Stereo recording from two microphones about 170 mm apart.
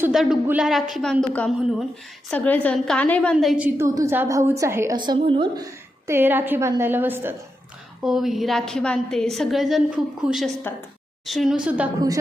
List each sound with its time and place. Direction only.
0.1 s a woman's voice: centre (ahead or behind)
3.3 s a woman's voice: 5° right (ahead or behind)
3.8 s a woman's voice: 15° right (ahead or behind)
4.9 s a woman's voice: 30° right (ahead or behind)
6.1 s a woman's voice: 10° right (ahead or behind)
8.0 s a woman's voice: centre (ahead or behind)
11.9 s a woman's voice: 20° right (ahead or behind)